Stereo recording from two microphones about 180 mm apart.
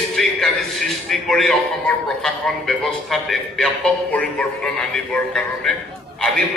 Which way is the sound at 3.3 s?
5° left (ahead or behind).